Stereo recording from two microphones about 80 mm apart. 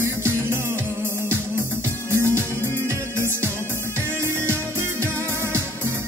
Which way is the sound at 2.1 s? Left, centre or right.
Right.